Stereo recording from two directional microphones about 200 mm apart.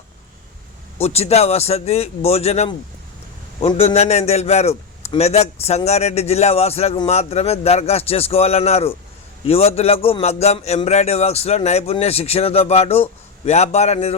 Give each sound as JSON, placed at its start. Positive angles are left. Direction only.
{"t": 0.9, "sound": "a man's voice", "side_deg": 30}